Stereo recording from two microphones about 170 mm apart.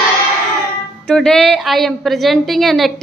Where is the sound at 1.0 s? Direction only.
5° left (ahead or behind).